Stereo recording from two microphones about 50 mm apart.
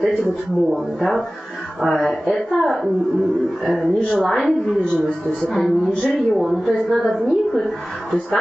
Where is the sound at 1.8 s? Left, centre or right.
Centre.